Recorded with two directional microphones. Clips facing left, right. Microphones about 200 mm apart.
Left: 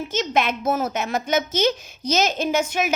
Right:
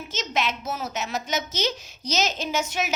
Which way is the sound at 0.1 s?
55° left (ahead or behind).